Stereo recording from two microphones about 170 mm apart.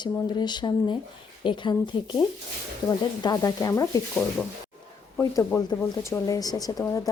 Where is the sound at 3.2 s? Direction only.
20° left (ahead or behind).